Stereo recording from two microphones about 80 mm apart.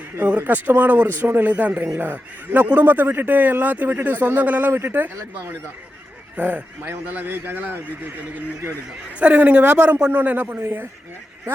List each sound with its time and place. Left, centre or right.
0.2 s a man's voice: right
9.1 s a man's voice: centre